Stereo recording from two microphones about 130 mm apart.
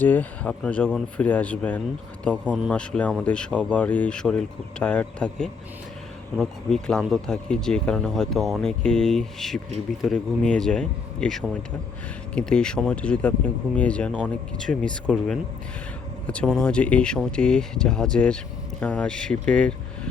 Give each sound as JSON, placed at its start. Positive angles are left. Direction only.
{"t": 0.0, "sound": "speech", "side_deg": 15}
{"t": 16.2, "sound": "speech", "side_deg": 10}